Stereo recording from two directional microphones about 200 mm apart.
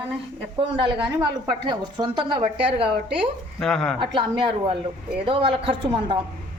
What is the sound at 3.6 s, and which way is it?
Speech, 5° left (ahead or behind).